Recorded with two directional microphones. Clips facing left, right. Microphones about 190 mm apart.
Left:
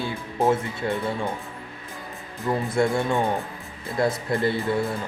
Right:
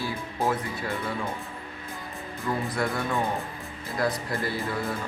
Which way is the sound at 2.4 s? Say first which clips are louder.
Left 6 dB; 25° left (ahead or behind).